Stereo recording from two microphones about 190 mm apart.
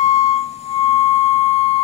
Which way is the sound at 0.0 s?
35° left (ahead or behind).